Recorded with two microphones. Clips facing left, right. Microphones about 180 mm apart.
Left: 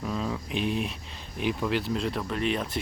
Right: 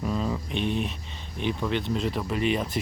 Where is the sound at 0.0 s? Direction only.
Centre (ahead or behind).